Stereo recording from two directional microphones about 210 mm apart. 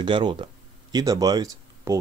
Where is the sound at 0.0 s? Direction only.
25° right (ahead or behind).